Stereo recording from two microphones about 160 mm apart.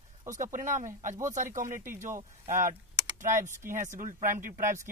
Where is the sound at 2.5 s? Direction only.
20° right (ahead or behind).